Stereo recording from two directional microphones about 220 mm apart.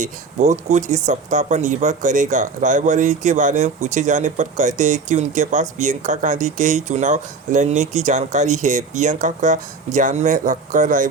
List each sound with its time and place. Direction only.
0.0 s speech: 35° right (ahead or behind)